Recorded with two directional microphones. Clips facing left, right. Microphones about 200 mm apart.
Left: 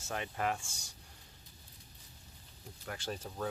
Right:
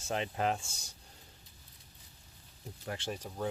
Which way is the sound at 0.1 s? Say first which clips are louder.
Right 3 dB; 25° right (ahead or behind).